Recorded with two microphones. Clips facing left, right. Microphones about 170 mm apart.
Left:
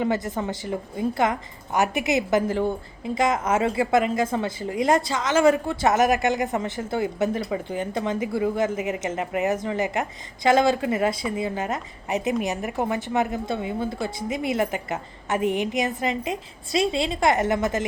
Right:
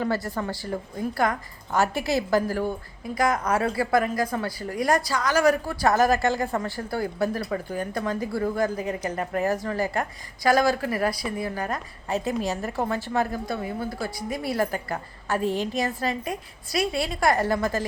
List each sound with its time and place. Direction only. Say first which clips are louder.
0.0 s a woman's voice: left 2 dB; 20° left (ahead or behind)